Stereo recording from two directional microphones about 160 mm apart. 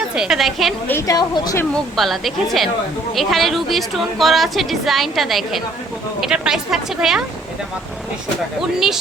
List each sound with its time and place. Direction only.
0.2 s a woman's voice: centre (ahead or behind)
0.9 s speech: 20° left (ahead or behind)
2.0 s a woman's voice: centre (ahead or behind)